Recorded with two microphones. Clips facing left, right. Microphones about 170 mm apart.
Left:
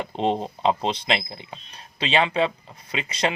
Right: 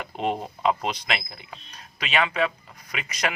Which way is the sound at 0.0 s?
25° left (ahead or behind).